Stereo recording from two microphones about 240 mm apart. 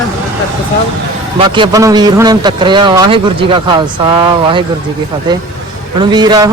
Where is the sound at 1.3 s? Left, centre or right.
Centre.